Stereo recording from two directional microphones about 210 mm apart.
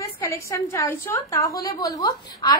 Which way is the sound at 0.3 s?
15° left (ahead or behind).